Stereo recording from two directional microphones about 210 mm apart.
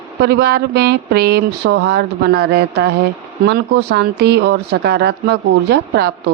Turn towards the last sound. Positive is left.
turn(degrees=-50)  # may be behind; listen again after turning